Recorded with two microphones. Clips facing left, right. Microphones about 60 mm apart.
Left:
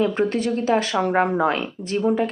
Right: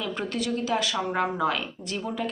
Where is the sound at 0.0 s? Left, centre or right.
Left.